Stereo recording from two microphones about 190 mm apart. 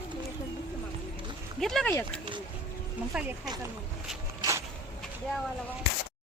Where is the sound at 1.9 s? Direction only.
10° left (ahead or behind).